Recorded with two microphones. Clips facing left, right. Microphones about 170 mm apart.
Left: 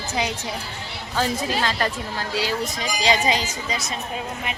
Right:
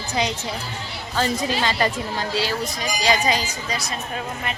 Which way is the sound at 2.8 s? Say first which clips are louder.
Right 1 dB; 25° left (ahead or behind).